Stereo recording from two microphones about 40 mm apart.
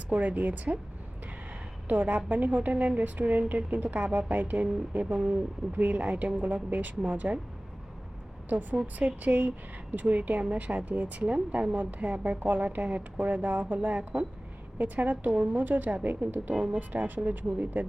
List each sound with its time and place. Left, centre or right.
0.1 s speech: right
1.9 s a woman's voice: right
9.0 s a woman's voice: right
11.7 s a woman's voice: right